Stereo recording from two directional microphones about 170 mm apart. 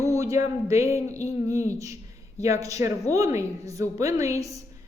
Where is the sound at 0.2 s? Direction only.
15° right (ahead or behind).